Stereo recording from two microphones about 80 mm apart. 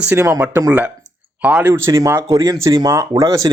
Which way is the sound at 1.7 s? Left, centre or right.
Right.